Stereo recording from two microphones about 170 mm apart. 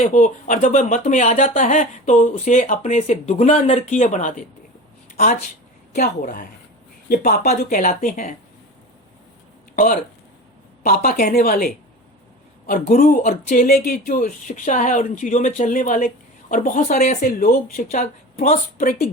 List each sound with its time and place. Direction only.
0.0 s speech: 45° left (ahead or behind)
5.1 s speech: 60° left (ahead or behind)
9.7 s speech: 55° left (ahead or behind)
17.2 s speech: 60° left (ahead or behind)